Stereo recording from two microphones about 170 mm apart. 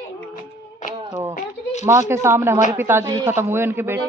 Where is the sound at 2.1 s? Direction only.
15° right (ahead or behind).